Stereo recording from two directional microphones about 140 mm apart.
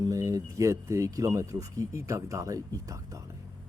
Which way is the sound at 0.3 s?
20° right (ahead or behind).